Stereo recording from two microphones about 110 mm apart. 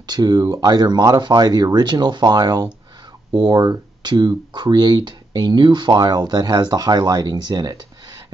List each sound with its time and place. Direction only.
0.0 s speech: 40° right (ahead or behind)